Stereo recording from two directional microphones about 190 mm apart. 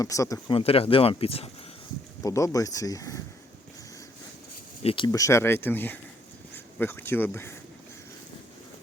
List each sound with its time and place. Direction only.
0.0 s speech: 15° left (ahead or behind)
2.2 s speech: 15° left (ahead or behind)
4.8 s speech: 30° left (ahead or behind); by 7.5 s 10° left (ahead or behind)